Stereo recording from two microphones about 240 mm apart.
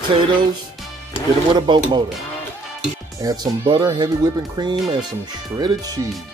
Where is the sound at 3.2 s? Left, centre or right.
Centre.